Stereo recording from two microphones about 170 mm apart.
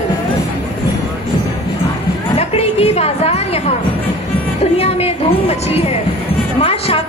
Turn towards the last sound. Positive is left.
turn(degrees=35)  # may be behind; listen again after turning